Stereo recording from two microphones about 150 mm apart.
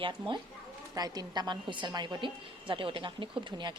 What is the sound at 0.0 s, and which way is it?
A woman's voice, 30° right (ahead or behind).